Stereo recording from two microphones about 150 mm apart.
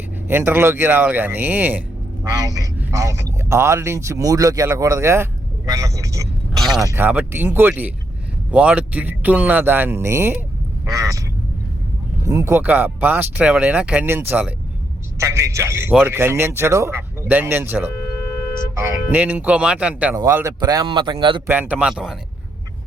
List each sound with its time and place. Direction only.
0.3 s speech: 15° right (ahead or behind)
2.4 s speech: 25° right (ahead or behind)
6.6 s a sound: centre (ahead or behind)
6.8 s speech: 15° right (ahead or behind)
12.2 s speech: 20° right (ahead or behind)
20.1 s speech: 20° right (ahead or behind)
21.4 s speech: 15° right (ahead or behind)